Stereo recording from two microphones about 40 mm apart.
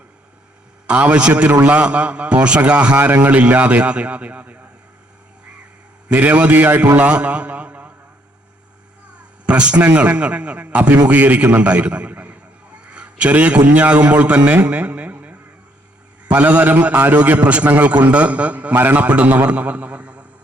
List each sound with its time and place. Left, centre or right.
0.9 s a man's voice: right
6.1 s a man's voice: right
6.9 s a man's voice: right
9.5 s a man's voice: right
18.8 s a man's voice: right
19.0 s a man's voice: right